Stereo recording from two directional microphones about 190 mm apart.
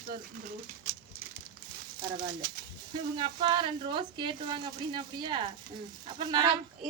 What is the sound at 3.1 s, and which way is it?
Speech, 25° right (ahead or behind).